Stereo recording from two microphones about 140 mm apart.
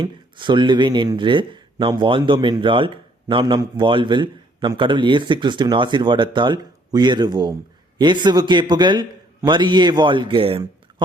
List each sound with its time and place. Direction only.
0.0 s speech: 35° right (ahead or behind)